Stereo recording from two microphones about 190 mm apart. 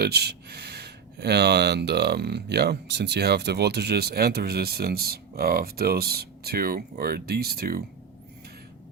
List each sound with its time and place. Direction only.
0.0 s speech: 60° right (ahead or behind)